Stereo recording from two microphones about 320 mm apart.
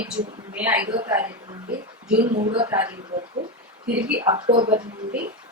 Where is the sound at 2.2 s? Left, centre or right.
Right.